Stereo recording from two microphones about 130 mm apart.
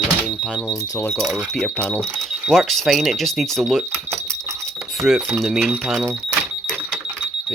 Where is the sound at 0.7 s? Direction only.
20° left (ahead or behind).